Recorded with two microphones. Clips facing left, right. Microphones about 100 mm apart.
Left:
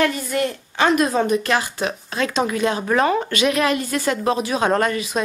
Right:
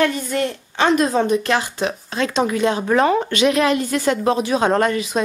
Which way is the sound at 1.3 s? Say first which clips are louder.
Right 1 dB; 25° right (ahead or behind).